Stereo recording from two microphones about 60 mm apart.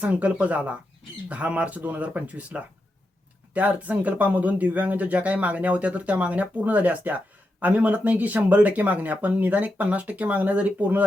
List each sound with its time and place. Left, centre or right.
0.0 s speech: right